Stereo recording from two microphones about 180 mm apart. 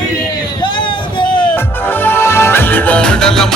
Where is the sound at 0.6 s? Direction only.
25° left (ahead or behind).